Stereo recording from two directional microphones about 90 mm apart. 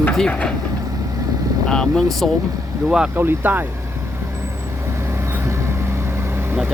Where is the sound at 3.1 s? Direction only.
20° right (ahead or behind).